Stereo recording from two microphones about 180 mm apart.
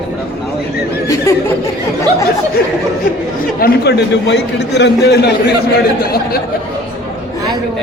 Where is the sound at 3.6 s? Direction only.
65° left (ahead or behind).